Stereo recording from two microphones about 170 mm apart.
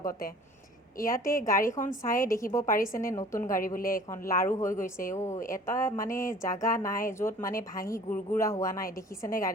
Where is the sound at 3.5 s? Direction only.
55° left (ahead or behind).